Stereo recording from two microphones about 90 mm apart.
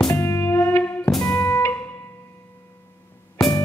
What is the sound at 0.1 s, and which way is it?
Music, 30° left (ahead or behind).